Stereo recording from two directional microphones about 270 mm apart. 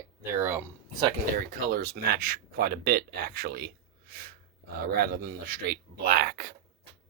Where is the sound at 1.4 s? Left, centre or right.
Right.